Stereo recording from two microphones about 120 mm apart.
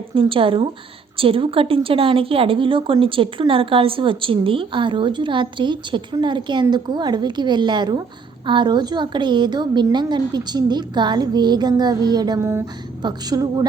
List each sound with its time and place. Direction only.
0.1 s a woman's voice: 45° right (ahead or behind)
12.4 s speech: 20° right (ahead or behind)
13.0 s a woman's voice: 35° right (ahead or behind)